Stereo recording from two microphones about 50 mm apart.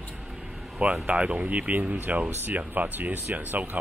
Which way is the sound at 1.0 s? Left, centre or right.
Right.